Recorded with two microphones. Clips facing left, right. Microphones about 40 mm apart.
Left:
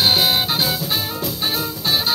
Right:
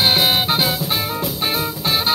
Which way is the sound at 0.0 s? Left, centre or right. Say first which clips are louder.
Right 1 dB; right.